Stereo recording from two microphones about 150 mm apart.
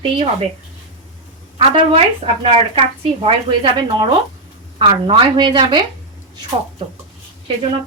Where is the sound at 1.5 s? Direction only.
35° right (ahead or behind).